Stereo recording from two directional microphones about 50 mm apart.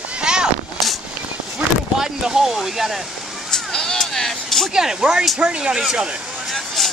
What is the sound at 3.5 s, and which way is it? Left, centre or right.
Vehicle, centre.